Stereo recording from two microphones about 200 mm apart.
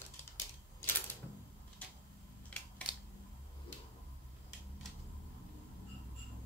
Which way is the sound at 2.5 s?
5° left (ahead or behind).